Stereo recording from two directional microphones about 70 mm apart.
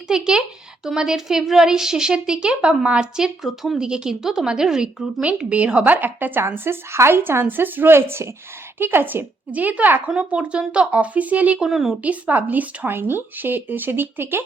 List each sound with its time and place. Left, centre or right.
0.1 s a woman's voice: centre
11.6 s a woman's voice: centre
12.0 s a woman's voice: right